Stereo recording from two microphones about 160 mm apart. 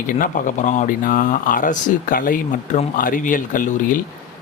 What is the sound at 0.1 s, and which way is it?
Speech, 55° left (ahead or behind).